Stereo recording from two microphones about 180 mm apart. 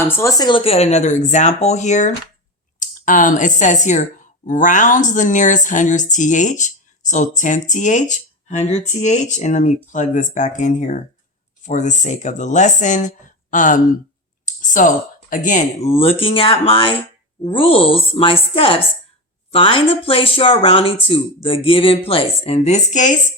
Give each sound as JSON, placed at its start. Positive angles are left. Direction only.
{"t": 0.1, "sound": "a woman's voice", "side_deg": 15}
{"t": 14.4, "sound": "a sound", "side_deg": 45}
{"t": 15.4, "sound": "speech", "side_deg": 40}